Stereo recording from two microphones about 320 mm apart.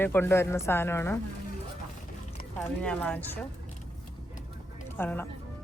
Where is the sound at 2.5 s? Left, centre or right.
Centre.